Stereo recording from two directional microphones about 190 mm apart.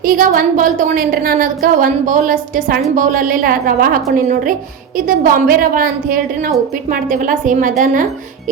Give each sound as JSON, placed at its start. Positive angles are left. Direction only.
{"t": 0.0, "sound": "a woman's voice", "side_deg": -50}